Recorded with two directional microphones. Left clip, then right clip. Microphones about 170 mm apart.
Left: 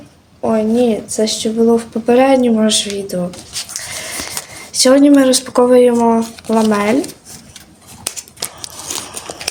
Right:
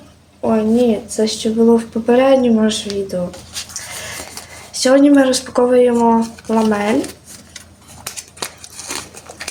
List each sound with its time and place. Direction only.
0.4 s speech: 20° left (ahead or behind)
4.7 s speech: 20° left (ahead or behind)